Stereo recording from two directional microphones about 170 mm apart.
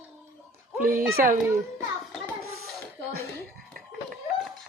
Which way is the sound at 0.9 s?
60° right (ahead or behind).